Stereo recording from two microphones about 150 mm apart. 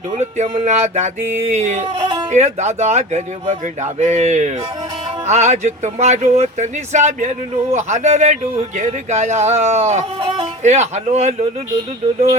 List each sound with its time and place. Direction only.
0.2 s speech: 50° right (ahead or behind)
2.0 s music: 30° right (ahead or behind)
2.3 s speech: 50° right (ahead or behind)
10.6 s speech: 50° right (ahead or behind)